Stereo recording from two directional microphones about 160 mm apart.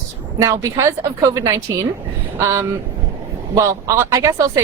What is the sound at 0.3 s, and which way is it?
A woman's voice, 20° right (ahead or behind).